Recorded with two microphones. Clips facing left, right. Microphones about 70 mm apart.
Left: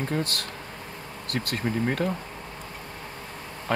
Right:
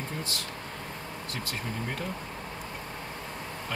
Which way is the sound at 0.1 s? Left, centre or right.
Left.